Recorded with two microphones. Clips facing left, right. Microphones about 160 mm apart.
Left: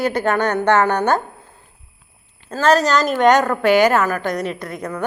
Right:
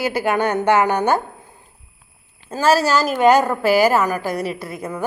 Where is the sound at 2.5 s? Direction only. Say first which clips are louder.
Left 1 dB; 10° right (ahead or behind).